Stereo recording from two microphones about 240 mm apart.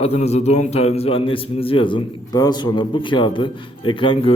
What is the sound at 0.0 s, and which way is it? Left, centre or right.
A man's voice, left.